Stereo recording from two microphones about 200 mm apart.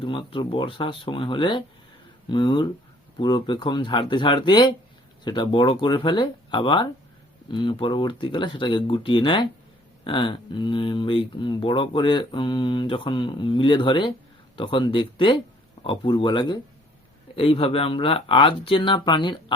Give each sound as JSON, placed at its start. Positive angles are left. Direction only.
{"t": 0.0, "sound": "speech", "side_deg": 25}